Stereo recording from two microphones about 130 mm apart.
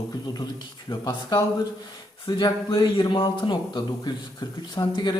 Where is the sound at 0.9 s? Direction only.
30° left (ahead or behind).